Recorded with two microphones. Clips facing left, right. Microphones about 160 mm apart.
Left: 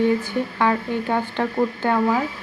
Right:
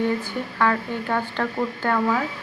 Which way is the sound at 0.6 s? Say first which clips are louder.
Even; 20° left (ahead or behind).